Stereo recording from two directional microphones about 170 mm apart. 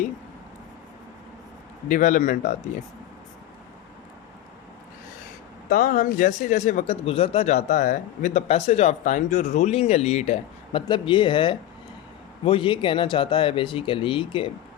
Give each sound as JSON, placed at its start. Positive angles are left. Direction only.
{"t": 1.9, "sound": "a man's voice", "side_deg": 50}
{"t": 5.6, "sound": "speech", "side_deg": 55}